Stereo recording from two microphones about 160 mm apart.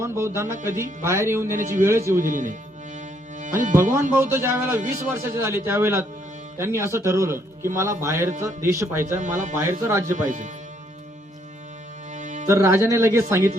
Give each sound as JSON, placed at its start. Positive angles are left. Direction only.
{"t": 0.0, "sound": "speech", "side_deg": -15}
{"t": 1.5, "sound": "speech", "side_deg": -55}
{"t": 1.8, "sound": "speech", "side_deg": -20}
{"t": 2.1, "sound": "music", "side_deg": -55}
{"t": 4.2, "sound": "speech", "side_deg": -15}
{"t": 9.1, "sound": "speech", "side_deg": -55}
{"t": 9.6, "sound": "speech", "side_deg": -15}
{"t": 10.1, "sound": "speech", "side_deg": -50}
{"t": 12.1, "sound": "music", "side_deg": -50}
{"t": 12.5, "sound": "speech", "side_deg": -15}